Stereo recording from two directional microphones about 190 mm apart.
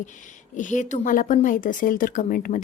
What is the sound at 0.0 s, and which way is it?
A woman's voice, 40° left (ahead or behind).